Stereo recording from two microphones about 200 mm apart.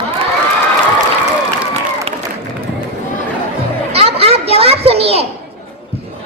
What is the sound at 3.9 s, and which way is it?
A child's voice, 30° right (ahead or behind).